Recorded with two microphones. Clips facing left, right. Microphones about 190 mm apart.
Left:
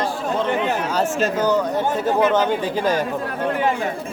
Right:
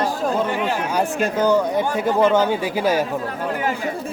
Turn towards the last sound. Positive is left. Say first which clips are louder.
# right 1 dB
turn(degrees=-10)  # may be behind; listen again after turning